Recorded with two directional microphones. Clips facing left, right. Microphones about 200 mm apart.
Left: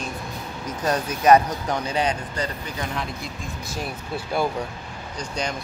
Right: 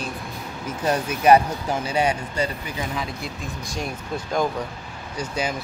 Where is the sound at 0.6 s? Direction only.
10° right (ahead or behind); by 4.5 s 10° left (ahead or behind).